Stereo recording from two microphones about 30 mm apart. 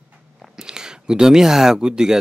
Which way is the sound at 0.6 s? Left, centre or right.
Right.